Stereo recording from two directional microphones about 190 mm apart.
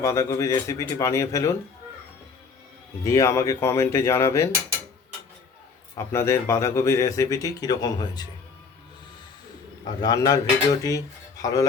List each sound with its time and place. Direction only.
0.0 s speech: 15° left (ahead or behind)
3.0 s speech: 15° left (ahead or behind)
6.0 s speech: 15° left (ahead or behind)
9.8 s speech: 20° left (ahead or behind)